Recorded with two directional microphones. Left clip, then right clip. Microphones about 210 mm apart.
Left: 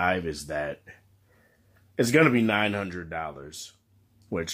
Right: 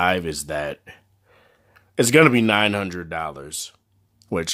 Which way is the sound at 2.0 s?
35° right (ahead or behind).